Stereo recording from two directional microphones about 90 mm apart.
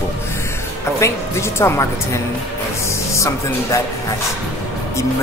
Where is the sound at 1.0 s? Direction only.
30° left (ahead or behind).